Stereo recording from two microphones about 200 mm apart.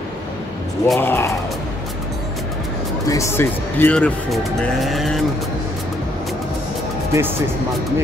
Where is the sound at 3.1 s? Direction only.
15° left (ahead or behind).